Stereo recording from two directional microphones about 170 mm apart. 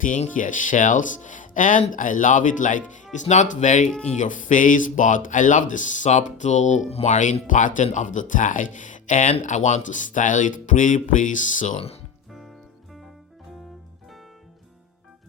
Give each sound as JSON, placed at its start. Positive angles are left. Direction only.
{"t": 0.0, "sound": "speech", "side_deg": 50}
{"t": 3.8, "sound": "speech", "side_deg": 5}
{"t": 4.2, "sound": "speech", "side_deg": 50}